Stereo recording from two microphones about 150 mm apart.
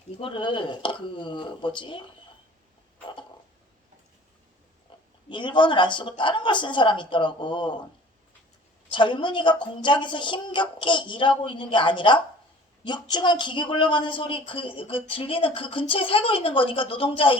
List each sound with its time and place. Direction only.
0.2 s speech: 35° left (ahead or behind)
4.9 s a sound: 30° left (ahead or behind)
5.3 s speech: 30° left (ahead or behind)
8.9 s a woman's voice: 30° left (ahead or behind)